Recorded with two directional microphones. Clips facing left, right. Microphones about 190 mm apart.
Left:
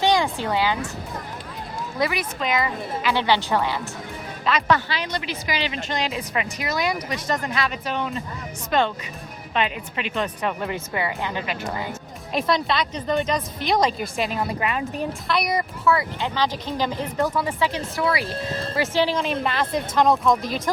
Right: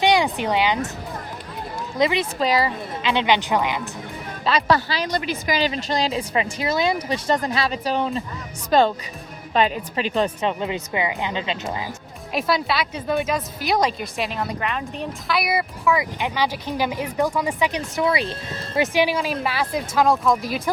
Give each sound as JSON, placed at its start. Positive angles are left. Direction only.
{"t": 0.0, "sound": "speech", "side_deg": -15}
{"t": 2.0, "sound": "speech", "side_deg": -20}
{"t": 2.4, "sound": "speech", "side_deg": -35}
{"t": 3.1, "sound": "speech", "side_deg": -20}
{"t": 4.4, "sound": "speech", "side_deg": -35}
{"t": 10.4, "sound": "speech", "side_deg": -20}
{"t": 12.3, "sound": "speech", "side_deg": -5}